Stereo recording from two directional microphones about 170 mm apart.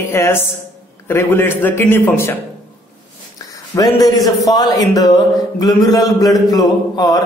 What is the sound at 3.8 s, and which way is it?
A man's voice, 20° left (ahead or behind).